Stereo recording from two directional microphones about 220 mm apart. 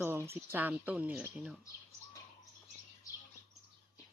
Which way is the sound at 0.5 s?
5° right (ahead or behind).